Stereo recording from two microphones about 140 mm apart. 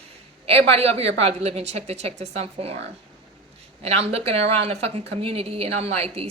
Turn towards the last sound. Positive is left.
turn(degrees=-45)  # may be behind; listen again after turning